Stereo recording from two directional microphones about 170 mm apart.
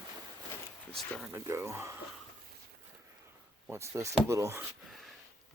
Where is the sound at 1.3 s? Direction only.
15° right (ahead or behind).